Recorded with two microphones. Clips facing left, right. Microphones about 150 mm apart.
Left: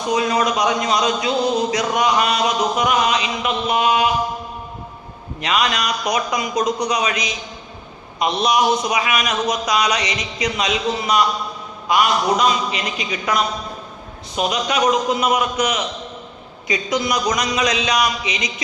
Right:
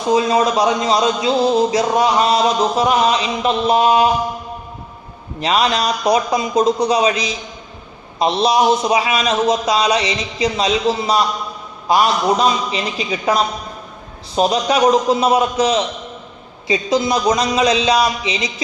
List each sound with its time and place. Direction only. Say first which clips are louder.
0.1 s music: right 4 dB; 25° right (ahead or behind)
5.4 s music: right 4 dB; 30° right (ahead or behind)
11.9 s a man's voice: right 2 dB; 30° right (ahead or behind)
14.3 s music: right 5 dB; 35° right (ahead or behind)